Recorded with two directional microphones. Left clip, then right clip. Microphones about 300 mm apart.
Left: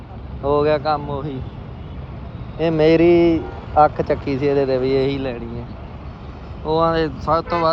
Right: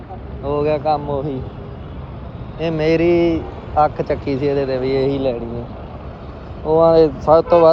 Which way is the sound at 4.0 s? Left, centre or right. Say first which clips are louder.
Even; centre.